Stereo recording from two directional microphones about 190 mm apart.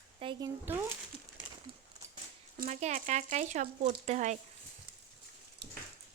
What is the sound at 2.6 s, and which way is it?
Speech, 35° right (ahead or behind).